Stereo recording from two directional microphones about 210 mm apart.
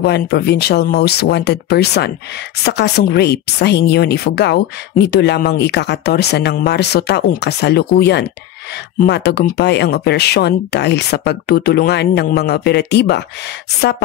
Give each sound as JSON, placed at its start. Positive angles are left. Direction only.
{"t": 0.0, "sound": "speech", "side_deg": 50}